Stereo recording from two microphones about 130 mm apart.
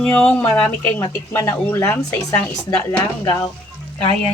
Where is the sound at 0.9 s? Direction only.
20° left (ahead or behind).